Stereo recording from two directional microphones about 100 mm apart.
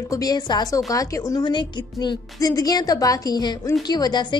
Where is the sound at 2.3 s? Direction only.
35° left (ahead or behind).